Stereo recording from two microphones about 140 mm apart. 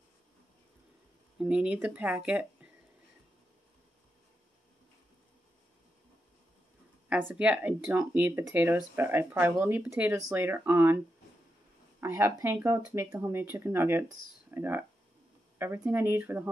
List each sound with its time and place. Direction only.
1.4 s speech: 10° right (ahead or behind)
7.3 s speech: 10° right (ahead or behind)
12.0 s speech: 15° right (ahead or behind)